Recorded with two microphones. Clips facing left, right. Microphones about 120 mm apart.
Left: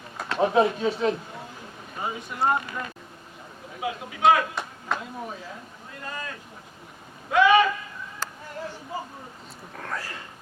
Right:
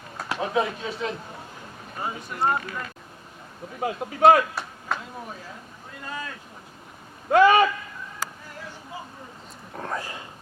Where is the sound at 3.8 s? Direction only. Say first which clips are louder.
Right 4 dB; 45° right (ahead or behind).